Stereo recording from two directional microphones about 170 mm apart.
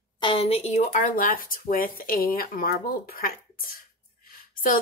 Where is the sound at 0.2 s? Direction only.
35° left (ahead or behind).